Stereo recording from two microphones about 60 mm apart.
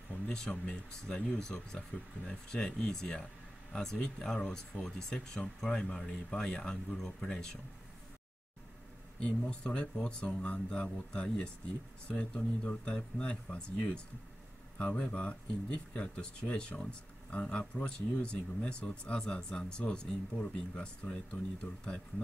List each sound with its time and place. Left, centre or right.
0.3 s speech: centre
9.2 s speech: centre